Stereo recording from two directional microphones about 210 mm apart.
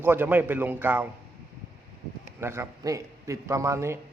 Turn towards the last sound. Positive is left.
turn(degrees=-15)  # may be behind; listen again after turning